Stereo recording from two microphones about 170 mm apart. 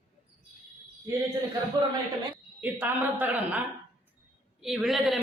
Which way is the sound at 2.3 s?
10° right (ahead or behind).